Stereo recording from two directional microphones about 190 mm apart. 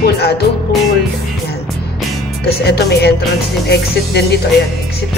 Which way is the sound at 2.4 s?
60° left (ahead or behind).